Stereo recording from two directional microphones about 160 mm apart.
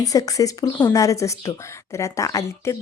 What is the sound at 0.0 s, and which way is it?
A woman's voice, 20° left (ahead or behind).